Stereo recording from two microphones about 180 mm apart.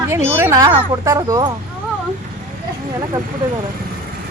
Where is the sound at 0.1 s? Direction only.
15° right (ahead or behind).